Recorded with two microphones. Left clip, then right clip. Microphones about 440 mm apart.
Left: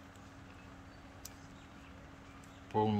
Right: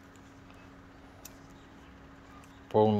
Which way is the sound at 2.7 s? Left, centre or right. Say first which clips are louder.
Right 8 dB; centre.